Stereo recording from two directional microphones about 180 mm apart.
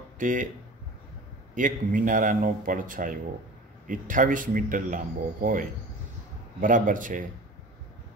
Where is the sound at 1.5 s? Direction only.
45° right (ahead or behind).